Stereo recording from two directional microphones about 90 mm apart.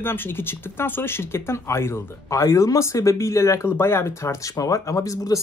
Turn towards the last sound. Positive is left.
turn(degrees=40)  # may be behind; listen again after turning